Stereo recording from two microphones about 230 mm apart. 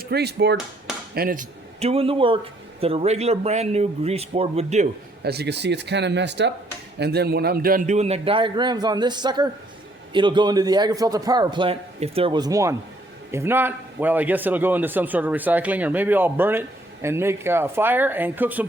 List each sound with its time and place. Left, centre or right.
0.0 s a man's voice: right
5.2 s a man's voice: right; by 18.6 s centre